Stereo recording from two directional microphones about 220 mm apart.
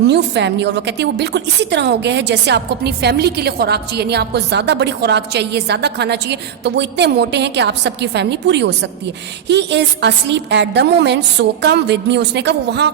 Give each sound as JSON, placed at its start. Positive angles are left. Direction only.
{"t": 0.1, "sound": "a woman's voice", "side_deg": -50}